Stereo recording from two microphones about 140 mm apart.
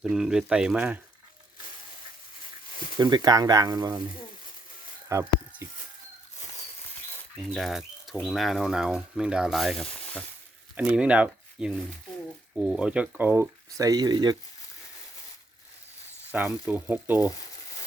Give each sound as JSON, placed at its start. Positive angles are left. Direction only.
{"t": 0.0, "sound": "speech", "side_deg": -5}
{"t": 3.0, "sound": "speech", "side_deg": -30}
{"t": 5.0, "sound": "a sound", "side_deg": -20}
{"t": 7.5, "sound": "speech", "side_deg": 0}
{"t": 10.8, "sound": "speech", "side_deg": -10}
{"t": 16.3, "sound": "speech", "side_deg": -10}